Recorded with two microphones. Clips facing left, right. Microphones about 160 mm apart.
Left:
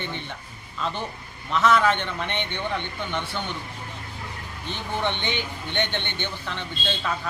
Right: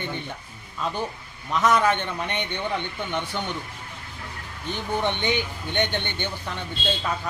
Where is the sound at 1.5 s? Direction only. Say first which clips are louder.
Even; 15° right (ahead or behind).